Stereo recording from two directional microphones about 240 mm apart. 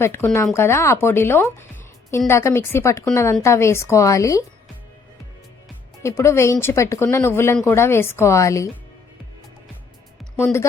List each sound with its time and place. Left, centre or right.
0.0 s speech: centre
6.0 s speech: centre
10.3 s speech: centre